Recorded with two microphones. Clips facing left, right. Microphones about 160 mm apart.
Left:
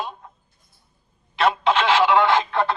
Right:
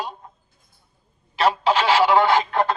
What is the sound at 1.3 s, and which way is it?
Telephone, 35° right (ahead or behind).